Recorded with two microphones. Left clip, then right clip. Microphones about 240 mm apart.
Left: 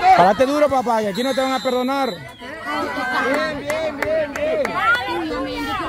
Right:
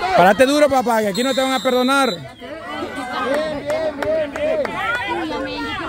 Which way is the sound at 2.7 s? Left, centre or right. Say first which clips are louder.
Left 5 dB; left.